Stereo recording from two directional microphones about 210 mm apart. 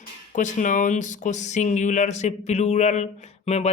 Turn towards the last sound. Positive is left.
turn(degrees=30)  # may be behind; listen again after turning